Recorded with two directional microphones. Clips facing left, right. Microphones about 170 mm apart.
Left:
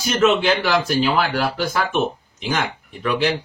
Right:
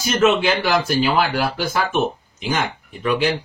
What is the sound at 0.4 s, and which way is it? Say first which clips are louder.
Speech: even; 10° right (ahead or behind).